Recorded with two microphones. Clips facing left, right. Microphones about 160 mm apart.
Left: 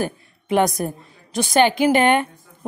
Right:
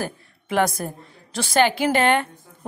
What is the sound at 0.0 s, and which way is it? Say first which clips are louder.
A woman's voice: left 4 dB; 20° left (ahead or behind).